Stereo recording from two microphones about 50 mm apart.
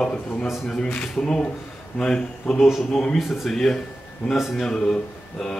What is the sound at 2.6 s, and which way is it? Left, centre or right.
Speech, centre.